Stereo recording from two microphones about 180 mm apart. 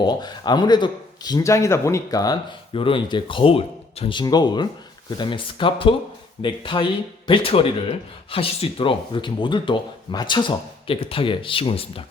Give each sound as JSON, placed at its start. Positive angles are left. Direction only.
{"t": 0.0, "sound": "speech", "side_deg": 25}